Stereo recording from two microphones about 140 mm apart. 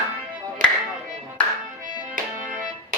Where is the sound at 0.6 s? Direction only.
70° right (ahead or behind).